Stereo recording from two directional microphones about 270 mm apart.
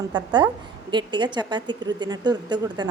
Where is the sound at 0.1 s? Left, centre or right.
Centre.